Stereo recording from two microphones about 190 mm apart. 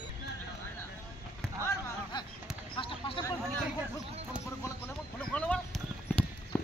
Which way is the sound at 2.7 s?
25° left (ahead or behind).